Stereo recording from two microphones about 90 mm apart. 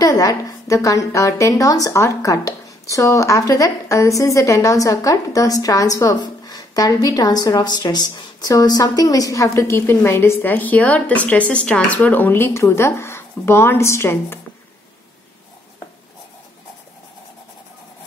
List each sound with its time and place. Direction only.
0.0 s a woman's voice: 45° left (ahead or behind)
6.1 s a woman's voice: 50° left (ahead or behind); by 14.4 s 30° left (ahead or behind)